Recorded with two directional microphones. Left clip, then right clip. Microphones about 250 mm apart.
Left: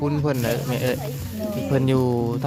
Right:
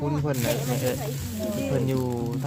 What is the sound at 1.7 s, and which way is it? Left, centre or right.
Speech, left.